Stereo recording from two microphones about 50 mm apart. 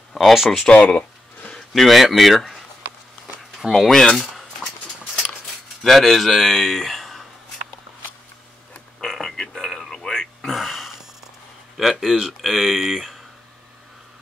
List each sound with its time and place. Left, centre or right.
0.1 s speech: centre
0.7 s a sound: left
1.5 s speech: centre
5.8 s speech: centre
9.0 s a sound: centre
11.7 s speech: centre